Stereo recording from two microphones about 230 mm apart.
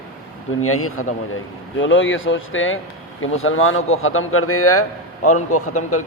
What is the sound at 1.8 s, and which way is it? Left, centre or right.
A man's voice, left.